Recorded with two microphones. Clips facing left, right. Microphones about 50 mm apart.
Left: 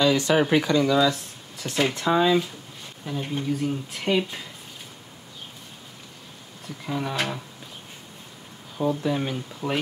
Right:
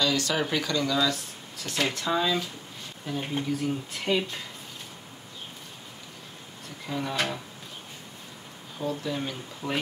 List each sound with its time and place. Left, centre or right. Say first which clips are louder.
0.0 s speech: left 6 dB; left
6.9 s speech: left 2 dB; centre
8.7 s speech: left 6 dB; left